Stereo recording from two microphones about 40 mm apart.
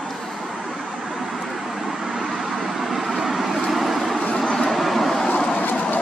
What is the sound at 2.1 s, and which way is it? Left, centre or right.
Vehicle, centre.